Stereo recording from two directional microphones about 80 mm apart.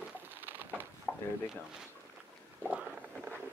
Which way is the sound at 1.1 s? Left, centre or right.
Centre.